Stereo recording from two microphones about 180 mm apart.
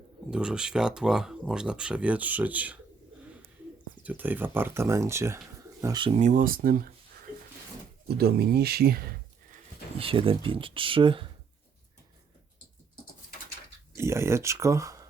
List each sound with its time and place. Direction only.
0.3 s speech: 5° right (ahead or behind)
4.0 s speech: 10° right (ahead or behind); by 6.1 s 25° right (ahead or behind)
6.1 s speech: 45° right (ahead or behind)
8.0 s speech: 60° right (ahead or behind)
10.0 s speech: 30° right (ahead or behind)
13.9 s speech: 15° right (ahead or behind)